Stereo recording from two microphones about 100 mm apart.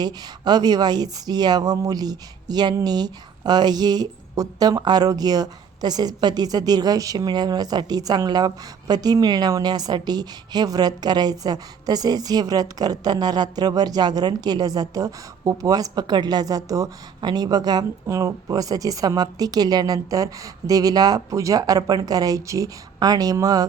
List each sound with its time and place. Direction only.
0.0 s speech: 45° right (ahead or behind)